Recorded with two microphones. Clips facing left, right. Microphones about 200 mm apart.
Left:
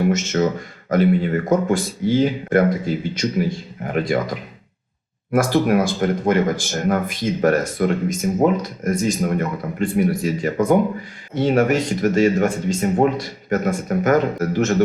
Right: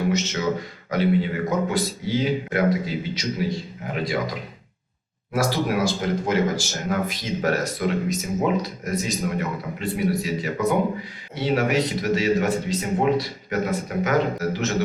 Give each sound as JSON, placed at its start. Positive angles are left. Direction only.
{"t": 0.1, "sound": "speech", "side_deg": 50}
{"t": 5.3, "sound": "speech", "side_deg": 55}